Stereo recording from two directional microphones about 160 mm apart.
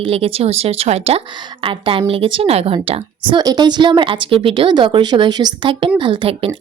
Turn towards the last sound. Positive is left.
turn(degrees=-35)  # may be behind; listen again after turning